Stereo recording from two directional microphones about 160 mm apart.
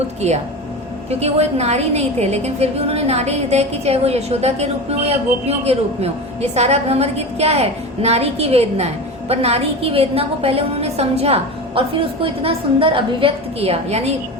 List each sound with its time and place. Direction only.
0.2 s a woman's voice: 40° right (ahead or behind)